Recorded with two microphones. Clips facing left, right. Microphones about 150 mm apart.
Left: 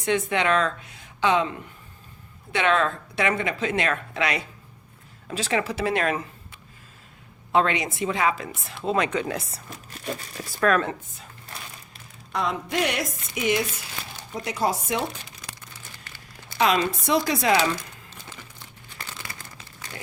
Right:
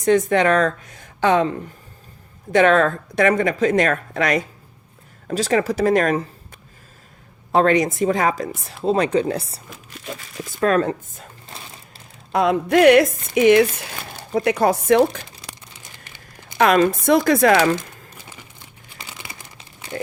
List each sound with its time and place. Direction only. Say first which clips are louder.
0.0 s speech: right 8 dB; 40° right (ahead or behind)
7.5 s speech: right 6 dB; 45° right (ahead or behind)
10.6 s speech: right 4 dB; 35° right (ahead or behind)
11.4 s sewing machine: left 1 dB; 25° right (ahead or behind)
12.4 s speech: right 11 dB; 60° right (ahead or behind)
16.6 s speech: right 7 dB; 55° right (ahead or behind)
18.9 s crumpling: right 1 dB; 15° right (ahead or behind)